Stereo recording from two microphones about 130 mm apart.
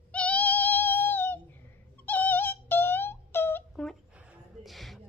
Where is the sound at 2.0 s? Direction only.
15° left (ahead or behind).